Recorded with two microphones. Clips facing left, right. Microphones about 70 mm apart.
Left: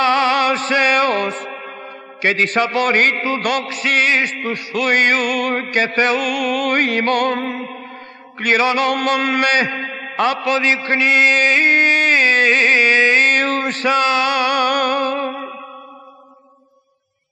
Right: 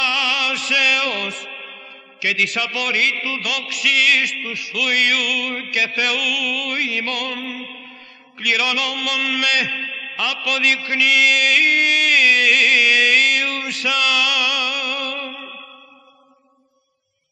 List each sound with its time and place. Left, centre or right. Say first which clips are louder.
0.0 s music: left 7 dB; left
8.4 s mantra: left 6 dB; left